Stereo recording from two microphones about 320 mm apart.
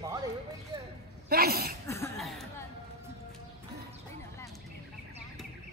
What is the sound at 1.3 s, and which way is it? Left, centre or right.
Speech, right.